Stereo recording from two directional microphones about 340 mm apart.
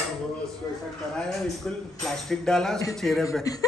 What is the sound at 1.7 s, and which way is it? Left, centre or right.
A woman's voice, centre.